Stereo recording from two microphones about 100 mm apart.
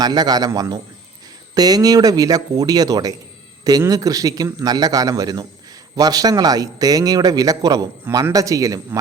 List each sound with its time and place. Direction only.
0.0 s a man's voice: 45° right (ahead or behind)